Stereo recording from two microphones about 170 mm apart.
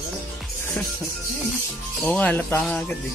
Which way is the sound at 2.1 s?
10° left (ahead or behind).